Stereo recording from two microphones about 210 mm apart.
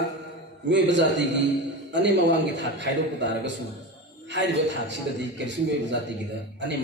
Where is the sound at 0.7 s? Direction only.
55° right (ahead or behind).